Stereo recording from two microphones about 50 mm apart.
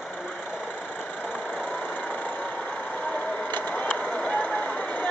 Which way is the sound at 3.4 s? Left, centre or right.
Left.